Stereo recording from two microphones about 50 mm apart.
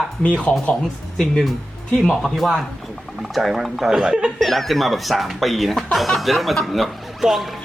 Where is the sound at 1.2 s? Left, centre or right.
Centre.